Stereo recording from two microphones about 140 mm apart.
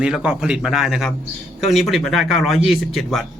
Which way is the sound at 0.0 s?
5° right (ahead or behind).